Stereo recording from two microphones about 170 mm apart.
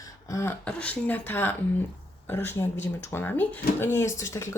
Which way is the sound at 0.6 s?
5° left (ahead or behind).